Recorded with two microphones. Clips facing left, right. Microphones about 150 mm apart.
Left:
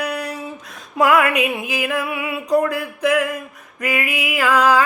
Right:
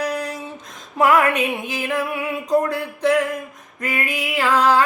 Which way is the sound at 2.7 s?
35° right (ahead or behind).